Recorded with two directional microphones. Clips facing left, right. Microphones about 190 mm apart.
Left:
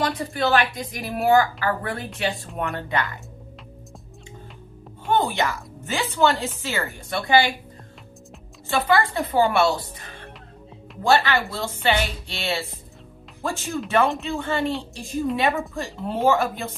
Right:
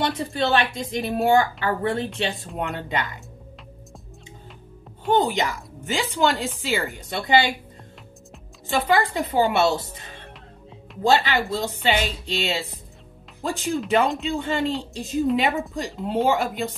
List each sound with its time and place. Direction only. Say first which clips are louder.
0.0 s a woman's voice: even; 25° right (ahead or behind)
5.1 s a woman's voice: right 1 dB; 15° right (ahead or behind)
8.6 s a woman's voice: even; 20° right (ahead or behind)